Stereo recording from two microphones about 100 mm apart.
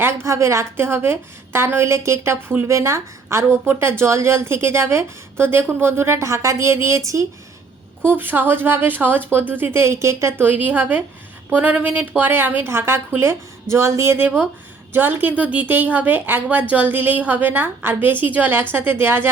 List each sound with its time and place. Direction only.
0.0 s a woman's voice: 30° right (ahead or behind)
8.0 s a woman's voice: 20° right (ahead or behind)